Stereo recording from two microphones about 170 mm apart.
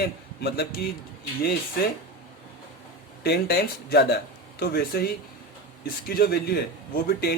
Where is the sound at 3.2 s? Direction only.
65° left (ahead or behind).